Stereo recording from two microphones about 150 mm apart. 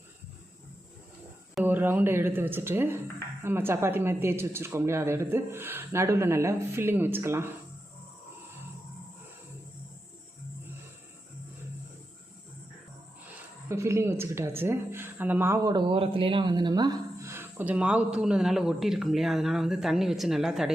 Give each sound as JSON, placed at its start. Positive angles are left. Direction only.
{"t": 1.6, "sound": "speech", "side_deg": -15}
{"t": 13.7, "sound": "speech", "side_deg": -20}